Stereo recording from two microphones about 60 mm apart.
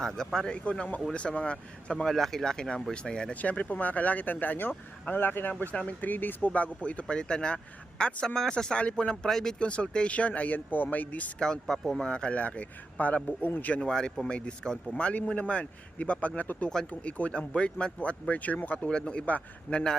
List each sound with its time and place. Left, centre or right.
0.2 s speech: centre
0.5 s speech: left
3.3 s speech: left
5.7 s speech: left
11.3 s speech: centre
13.8 s speech: centre